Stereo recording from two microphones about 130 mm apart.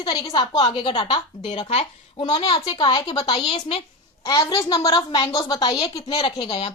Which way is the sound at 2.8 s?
45° left (ahead or behind).